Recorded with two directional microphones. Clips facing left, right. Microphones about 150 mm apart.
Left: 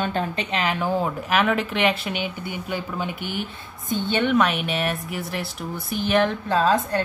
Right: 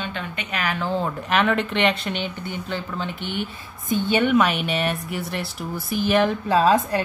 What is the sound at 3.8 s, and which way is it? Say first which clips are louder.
Speech: right 2 dB; 10° right (ahead or behind).